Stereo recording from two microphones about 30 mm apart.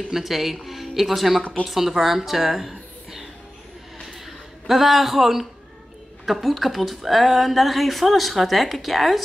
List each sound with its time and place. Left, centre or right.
0.1 s a woman's voice: centre
4.6 s speech: centre